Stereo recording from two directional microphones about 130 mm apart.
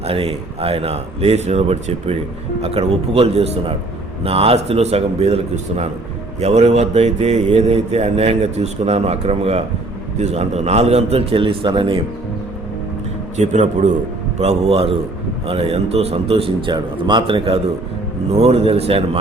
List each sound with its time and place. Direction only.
0.0 s speech: 50° right (ahead or behind)
13.3 s speech: 65° right (ahead or behind)
14.3 s speech: 55° right (ahead or behind)